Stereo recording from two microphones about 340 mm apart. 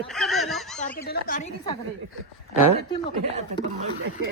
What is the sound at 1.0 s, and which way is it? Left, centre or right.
Speech, left.